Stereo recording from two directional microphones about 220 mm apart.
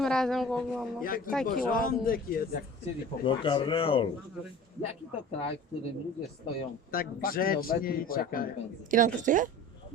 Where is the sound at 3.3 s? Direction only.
20° left (ahead or behind).